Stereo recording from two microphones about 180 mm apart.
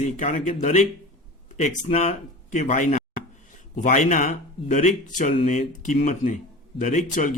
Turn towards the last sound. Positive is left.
turn(degrees=45)  # may be behind; listen again after turning